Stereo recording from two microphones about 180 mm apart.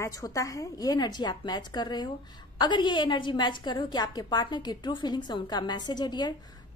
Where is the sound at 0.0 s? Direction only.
20° left (ahead or behind).